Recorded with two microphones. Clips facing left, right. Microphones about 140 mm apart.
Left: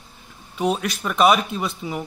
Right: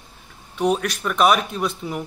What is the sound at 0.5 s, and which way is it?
A man's voice, 10° left (ahead or behind).